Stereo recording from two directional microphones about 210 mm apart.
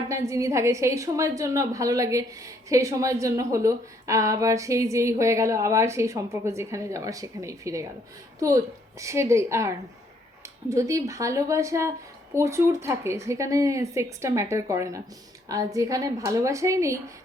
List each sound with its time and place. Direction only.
0.1 s a woman's voice: 15° right (ahead or behind)